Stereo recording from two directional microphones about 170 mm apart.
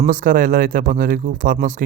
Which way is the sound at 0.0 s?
50° right (ahead or behind).